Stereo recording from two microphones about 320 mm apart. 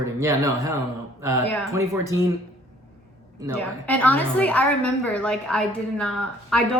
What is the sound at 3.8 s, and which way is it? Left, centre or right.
A woman's voice, centre.